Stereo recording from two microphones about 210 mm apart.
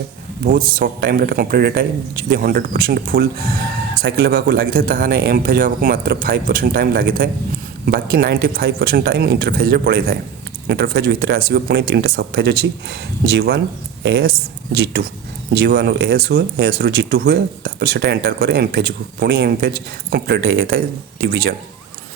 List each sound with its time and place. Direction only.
0.4 s speech: 40° right (ahead or behind)